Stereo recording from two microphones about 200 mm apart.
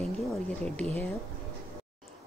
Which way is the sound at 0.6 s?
5° left (ahead or behind).